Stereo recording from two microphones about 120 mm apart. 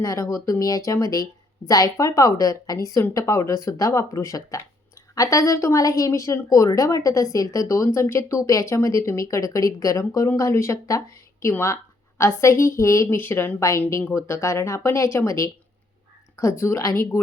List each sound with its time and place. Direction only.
0.0 s a woman's voice: 30° left (ahead or behind)